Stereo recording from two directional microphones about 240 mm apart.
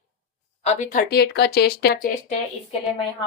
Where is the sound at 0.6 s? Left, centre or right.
Left.